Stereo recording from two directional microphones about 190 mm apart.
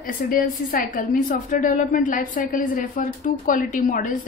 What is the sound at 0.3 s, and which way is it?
A woman's voice, 50° left (ahead or behind).